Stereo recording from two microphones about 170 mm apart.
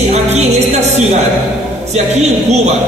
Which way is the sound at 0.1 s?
40° right (ahead or behind).